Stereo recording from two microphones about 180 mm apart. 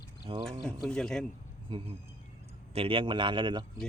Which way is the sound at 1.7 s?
25° right (ahead or behind).